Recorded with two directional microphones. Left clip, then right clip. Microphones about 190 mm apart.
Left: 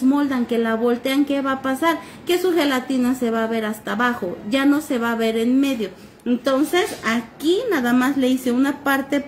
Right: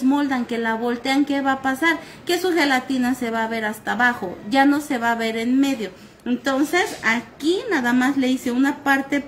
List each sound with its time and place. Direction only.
0.1 s a woman's voice: 40° right (ahead or behind)